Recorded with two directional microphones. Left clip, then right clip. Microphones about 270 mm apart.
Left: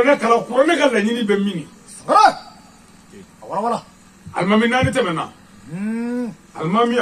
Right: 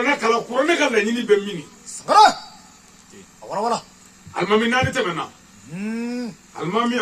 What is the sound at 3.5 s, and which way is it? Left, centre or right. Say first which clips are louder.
Speech: left 1 dB; right.